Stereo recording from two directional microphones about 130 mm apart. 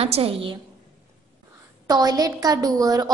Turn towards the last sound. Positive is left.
turn(degrees=-30)  # may be behind; listen again after turning